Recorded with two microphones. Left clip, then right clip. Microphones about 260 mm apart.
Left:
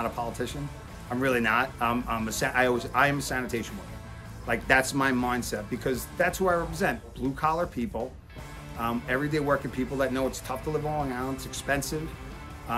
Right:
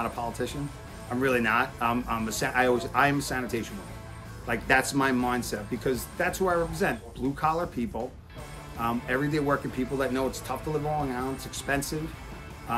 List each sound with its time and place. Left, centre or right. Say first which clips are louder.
0.2 s speech: even; centre